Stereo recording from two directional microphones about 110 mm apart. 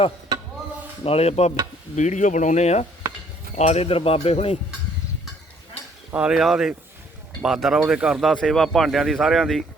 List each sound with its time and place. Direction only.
1.0 s speech: 65° left (ahead or behind)
2.0 s speech: 90° left; by 4.5 s 65° left (ahead or behind)
6.1 s speech: 10° right (ahead or behind)
8.3 s speech: 5° left (ahead or behind)